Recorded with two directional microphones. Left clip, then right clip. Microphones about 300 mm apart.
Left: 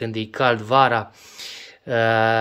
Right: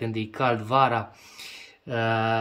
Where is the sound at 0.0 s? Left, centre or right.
Centre.